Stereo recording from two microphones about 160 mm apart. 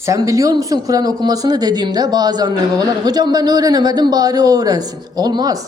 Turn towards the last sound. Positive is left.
turn(degrees=-25)  # may be behind; listen again after turning